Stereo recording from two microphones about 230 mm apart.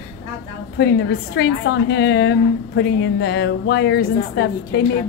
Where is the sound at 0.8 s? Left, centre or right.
Left.